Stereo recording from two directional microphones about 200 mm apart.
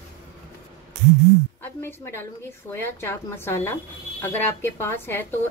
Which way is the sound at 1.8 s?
10° left (ahead or behind).